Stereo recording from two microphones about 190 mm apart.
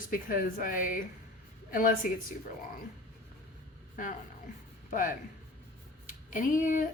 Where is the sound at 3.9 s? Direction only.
45° left (ahead or behind).